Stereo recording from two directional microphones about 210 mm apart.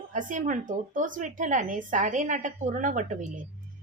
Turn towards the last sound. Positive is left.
turn(degrees=-40)  # may be behind; listen again after turning